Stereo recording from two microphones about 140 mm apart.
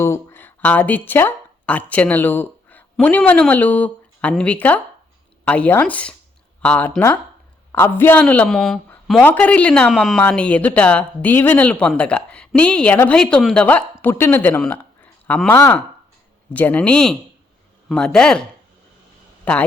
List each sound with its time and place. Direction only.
0.0 s speech: 20° left (ahead or behind)
14.6 s a sound: 10° left (ahead or behind)
15.4 s speech: 15° left (ahead or behind)